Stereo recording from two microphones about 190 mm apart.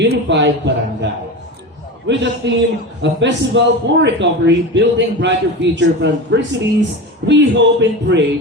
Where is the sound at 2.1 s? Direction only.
70° right (ahead or behind).